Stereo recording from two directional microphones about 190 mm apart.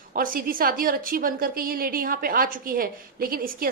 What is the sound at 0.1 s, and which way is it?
A woman's voice, 50° right (ahead or behind).